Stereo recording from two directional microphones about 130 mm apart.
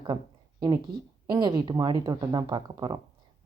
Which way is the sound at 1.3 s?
35° right (ahead or behind).